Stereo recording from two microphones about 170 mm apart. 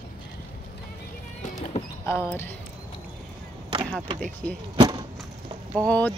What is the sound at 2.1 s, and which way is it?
Speech, 15° left (ahead or behind).